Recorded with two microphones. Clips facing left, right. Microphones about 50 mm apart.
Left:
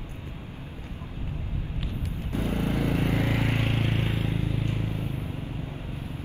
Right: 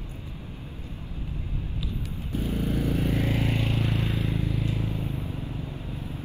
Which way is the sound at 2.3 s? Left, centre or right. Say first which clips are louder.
Left 1 dB; left.